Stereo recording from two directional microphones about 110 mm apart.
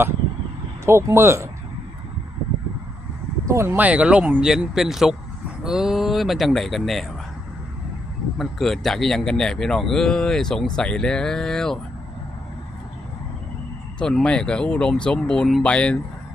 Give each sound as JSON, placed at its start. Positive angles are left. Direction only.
{"t": 0.9, "sound": "speech", "side_deg": -25}
{"t": 3.4, "sound": "speech", "side_deg": -25}
{"t": 3.8, "sound": "speech", "side_deg": -10}
{"t": 8.4, "sound": "speech", "side_deg": 0}
{"t": 14.0, "sound": "speech", "side_deg": 5}